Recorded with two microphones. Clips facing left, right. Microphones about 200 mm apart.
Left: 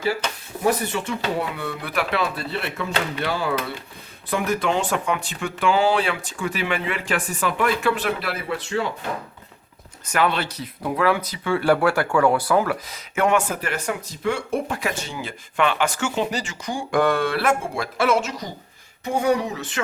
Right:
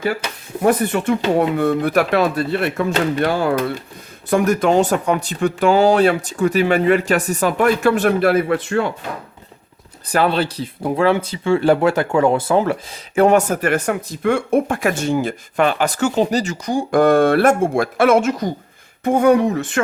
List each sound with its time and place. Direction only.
0.6 s speech: 55° right (ahead or behind)
10.1 s speech: 35° right (ahead or behind)
13.5 s speech: 50° right (ahead or behind)